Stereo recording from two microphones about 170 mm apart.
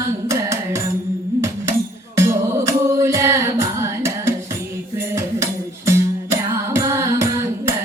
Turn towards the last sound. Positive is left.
turn(degrees=-15)  # may be behind; listen again after turning